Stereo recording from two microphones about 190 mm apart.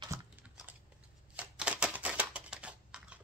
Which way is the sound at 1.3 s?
5° right (ahead or behind).